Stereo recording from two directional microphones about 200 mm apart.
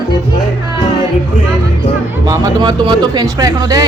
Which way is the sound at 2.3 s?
20° right (ahead or behind).